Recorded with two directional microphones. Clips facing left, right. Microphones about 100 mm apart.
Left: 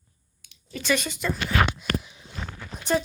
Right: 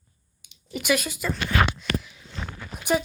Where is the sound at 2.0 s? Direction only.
20° left (ahead or behind).